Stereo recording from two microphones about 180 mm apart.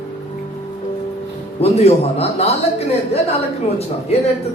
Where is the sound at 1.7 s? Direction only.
35° left (ahead or behind).